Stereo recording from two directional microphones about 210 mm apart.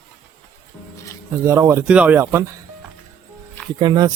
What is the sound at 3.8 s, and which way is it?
Speech, 20° right (ahead or behind).